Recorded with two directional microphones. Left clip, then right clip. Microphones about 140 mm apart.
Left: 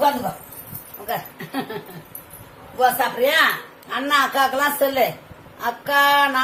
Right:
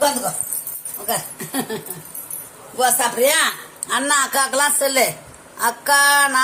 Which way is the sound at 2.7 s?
55° right (ahead or behind).